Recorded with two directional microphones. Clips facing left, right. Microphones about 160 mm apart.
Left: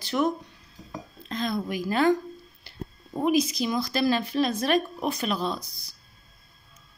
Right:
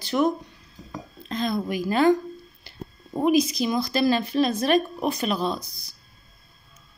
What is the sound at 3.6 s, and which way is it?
A woman's voice, 10° right (ahead or behind).